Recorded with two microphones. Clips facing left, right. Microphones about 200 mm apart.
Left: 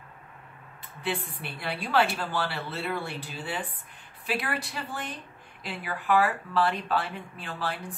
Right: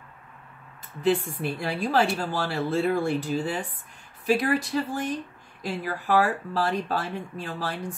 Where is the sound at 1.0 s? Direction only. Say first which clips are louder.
Right 9 dB; 40° right (ahead or behind).